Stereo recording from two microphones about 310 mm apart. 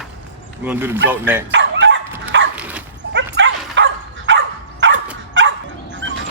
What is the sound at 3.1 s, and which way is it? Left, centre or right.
Dog, right.